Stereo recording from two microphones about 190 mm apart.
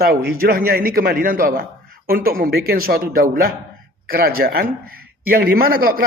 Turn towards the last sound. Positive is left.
turn(degrees=-50)  # may be behind; listen again after turning